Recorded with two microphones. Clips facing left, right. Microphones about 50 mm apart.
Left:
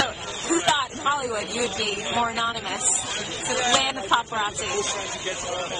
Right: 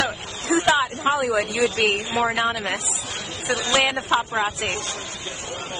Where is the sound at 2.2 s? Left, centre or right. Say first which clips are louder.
Right 4 dB; right.